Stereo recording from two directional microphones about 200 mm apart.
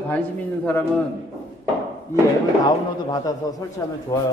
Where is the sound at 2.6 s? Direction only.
20° left (ahead or behind).